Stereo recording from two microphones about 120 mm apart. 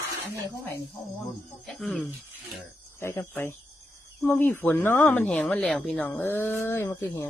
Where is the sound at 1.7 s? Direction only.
5° left (ahead or behind).